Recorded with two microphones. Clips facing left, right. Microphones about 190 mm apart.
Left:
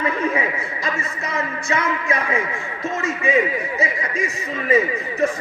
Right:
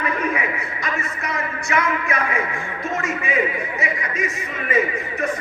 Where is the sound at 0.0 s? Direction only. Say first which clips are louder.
Left 2 dB; 25° left (ahead or behind).